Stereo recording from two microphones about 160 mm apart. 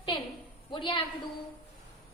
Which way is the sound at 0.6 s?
30° left (ahead or behind).